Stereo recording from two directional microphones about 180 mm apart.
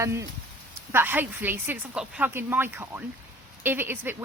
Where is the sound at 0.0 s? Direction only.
15° right (ahead or behind).